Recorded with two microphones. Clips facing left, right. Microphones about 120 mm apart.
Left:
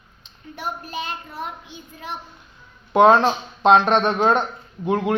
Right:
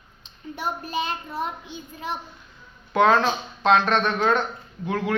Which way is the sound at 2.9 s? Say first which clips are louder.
Left 5 dB; 20° left (ahead or behind).